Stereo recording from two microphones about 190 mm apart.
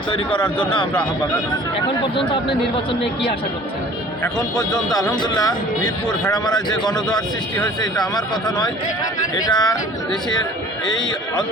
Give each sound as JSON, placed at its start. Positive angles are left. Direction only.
{"t": 0.1, "sound": "speech", "side_deg": 25}
{"t": 2.0, "sound": "speech", "side_deg": 25}
{"t": 5.2, "sound": "speech", "side_deg": 20}
{"t": 7.8, "sound": "speech", "side_deg": 20}
{"t": 10.8, "sound": "a man's voice", "side_deg": 25}